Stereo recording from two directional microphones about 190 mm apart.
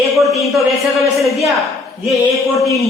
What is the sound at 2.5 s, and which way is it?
Speech, 15° left (ahead or behind).